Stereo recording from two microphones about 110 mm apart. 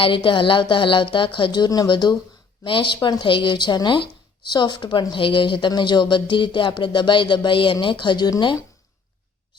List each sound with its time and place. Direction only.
0.0 s speech: 50° left (ahead or behind)